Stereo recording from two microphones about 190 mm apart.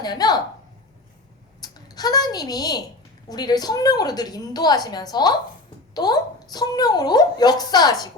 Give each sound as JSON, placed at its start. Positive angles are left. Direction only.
{"t": 0.0, "sound": "a woman's voice", "side_deg": 20}
{"t": 1.6, "sound": "a child's voice", "side_deg": 20}